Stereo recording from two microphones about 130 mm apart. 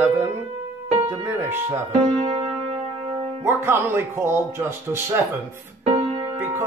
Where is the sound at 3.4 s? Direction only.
20° right (ahead or behind).